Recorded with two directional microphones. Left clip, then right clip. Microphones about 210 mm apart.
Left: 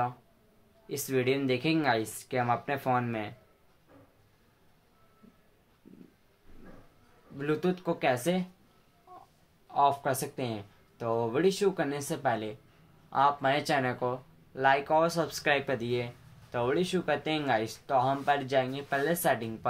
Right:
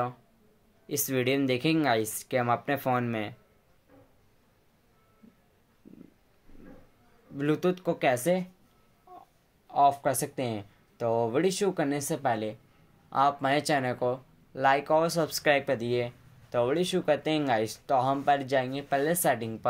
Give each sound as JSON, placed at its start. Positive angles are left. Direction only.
{"t": 0.8, "sound": "speech", "side_deg": -45}
{"t": 7.3, "sound": "speech", "side_deg": -45}
{"t": 9.7, "sound": "speech", "side_deg": -40}